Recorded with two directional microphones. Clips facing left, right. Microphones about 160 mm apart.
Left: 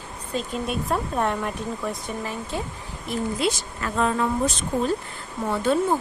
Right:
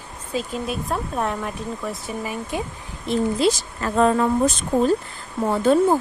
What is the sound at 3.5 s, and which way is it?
Speech, 40° right (ahead or behind).